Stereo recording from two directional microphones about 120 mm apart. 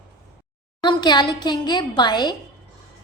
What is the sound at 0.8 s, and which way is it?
Music, 40° left (ahead or behind).